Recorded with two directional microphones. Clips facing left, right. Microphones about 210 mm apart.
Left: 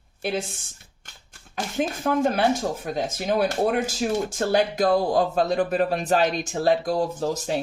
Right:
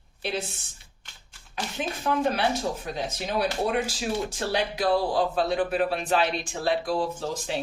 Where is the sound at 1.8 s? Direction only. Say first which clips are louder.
Left 4 dB; 45° left (ahead or behind).